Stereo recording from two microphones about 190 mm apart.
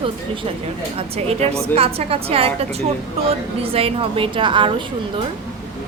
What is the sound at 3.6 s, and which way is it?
A woman's voice, 30° right (ahead or behind).